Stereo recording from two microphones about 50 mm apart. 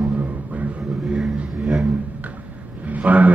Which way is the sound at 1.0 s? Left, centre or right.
Centre.